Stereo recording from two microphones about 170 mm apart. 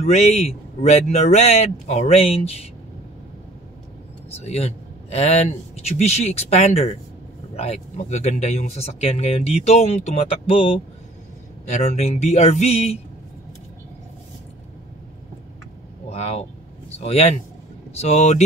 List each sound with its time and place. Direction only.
0.0 s speech: 40° left (ahead or behind)
4.5 s speech: 40° left (ahead or behind)
16.1 s speech: 35° left (ahead or behind)